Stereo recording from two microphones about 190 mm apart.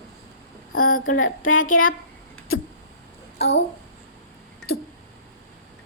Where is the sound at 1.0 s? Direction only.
90° left.